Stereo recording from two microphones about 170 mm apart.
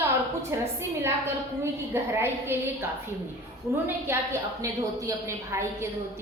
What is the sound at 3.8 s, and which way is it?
A woman's voice, 15° right (ahead or behind).